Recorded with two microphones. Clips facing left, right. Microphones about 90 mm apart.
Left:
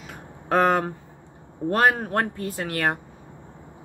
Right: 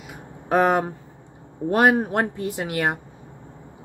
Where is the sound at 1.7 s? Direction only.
15° right (ahead or behind).